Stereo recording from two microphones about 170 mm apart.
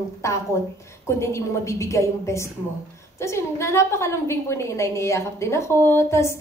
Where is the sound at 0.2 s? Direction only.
15° left (ahead or behind).